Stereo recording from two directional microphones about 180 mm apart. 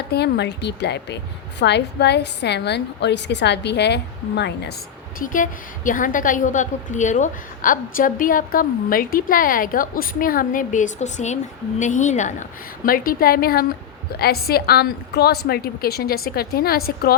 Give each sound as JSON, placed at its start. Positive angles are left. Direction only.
{"t": 0.1, "sound": "a woman's voice", "side_deg": 65}
{"t": 5.2, "sound": "a woman's voice", "side_deg": 45}